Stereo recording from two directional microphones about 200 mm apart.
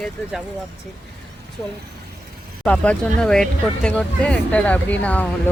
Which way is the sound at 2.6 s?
5° left (ahead or behind).